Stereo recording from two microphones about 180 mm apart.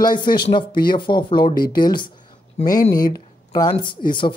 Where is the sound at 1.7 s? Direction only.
25° left (ahead or behind).